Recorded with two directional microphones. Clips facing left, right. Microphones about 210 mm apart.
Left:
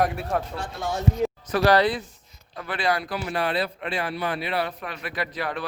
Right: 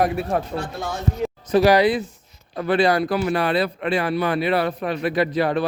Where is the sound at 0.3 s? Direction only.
15° right (ahead or behind).